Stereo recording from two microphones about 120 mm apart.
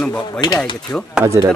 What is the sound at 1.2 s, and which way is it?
Speech, 25° right (ahead or behind).